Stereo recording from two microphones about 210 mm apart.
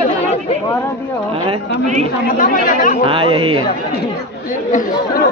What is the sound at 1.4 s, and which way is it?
Speech, 35° right (ahead or behind).